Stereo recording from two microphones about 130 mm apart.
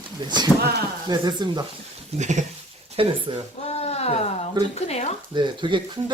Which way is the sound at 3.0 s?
45° right (ahead or behind).